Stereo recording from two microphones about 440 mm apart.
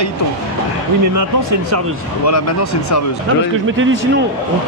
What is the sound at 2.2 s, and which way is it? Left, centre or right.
Speech, left.